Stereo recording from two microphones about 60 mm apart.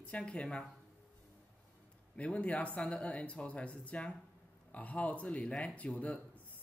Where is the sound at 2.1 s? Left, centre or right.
Left.